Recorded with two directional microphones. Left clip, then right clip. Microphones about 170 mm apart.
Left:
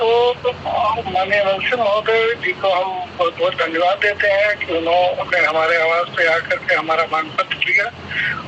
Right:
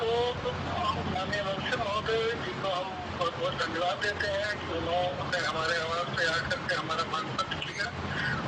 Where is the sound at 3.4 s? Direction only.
15° left (ahead or behind).